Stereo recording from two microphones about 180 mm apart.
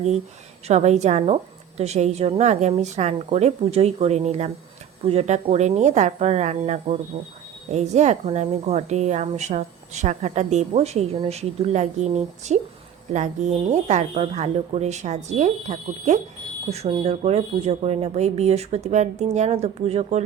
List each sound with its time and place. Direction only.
0.7 s speech: 40° right (ahead or behind)